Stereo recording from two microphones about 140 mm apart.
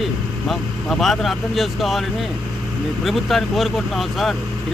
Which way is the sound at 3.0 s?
Centre (ahead or behind).